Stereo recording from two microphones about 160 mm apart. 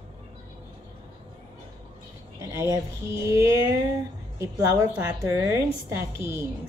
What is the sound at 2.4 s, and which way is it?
Speech, 20° right (ahead or behind).